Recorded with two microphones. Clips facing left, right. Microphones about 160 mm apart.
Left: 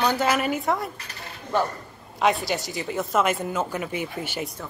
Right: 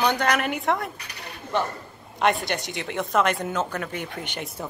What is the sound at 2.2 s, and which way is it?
Speech, centre (ahead or behind).